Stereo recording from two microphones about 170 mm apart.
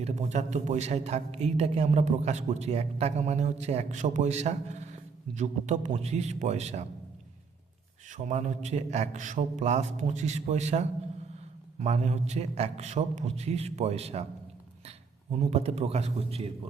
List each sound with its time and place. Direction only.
0.0 s a man's voice: 40° right (ahead or behind)
8.1 s a man's voice: 45° right (ahead or behind)